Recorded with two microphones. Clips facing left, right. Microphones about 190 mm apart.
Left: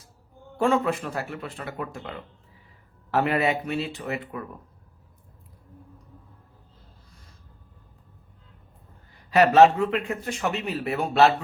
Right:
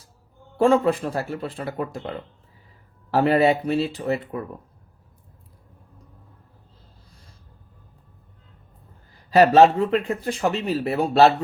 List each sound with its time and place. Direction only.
0.5 s a man's voice: 30° right (ahead or behind)
9.1 s a man's voice: 35° right (ahead or behind)